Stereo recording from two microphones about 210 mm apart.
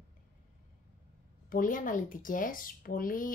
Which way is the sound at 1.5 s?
40° left (ahead or behind).